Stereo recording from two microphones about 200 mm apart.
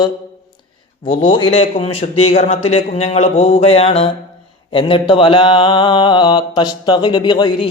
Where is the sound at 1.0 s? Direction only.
25° left (ahead or behind).